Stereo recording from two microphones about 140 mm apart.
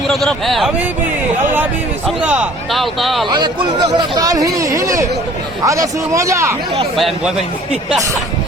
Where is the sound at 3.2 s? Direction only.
30° right (ahead or behind).